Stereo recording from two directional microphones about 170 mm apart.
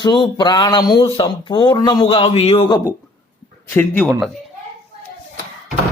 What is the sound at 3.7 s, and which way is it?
Speech, 5° left (ahead or behind).